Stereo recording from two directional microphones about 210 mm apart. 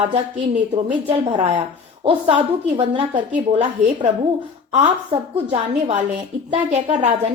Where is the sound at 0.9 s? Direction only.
25° right (ahead or behind).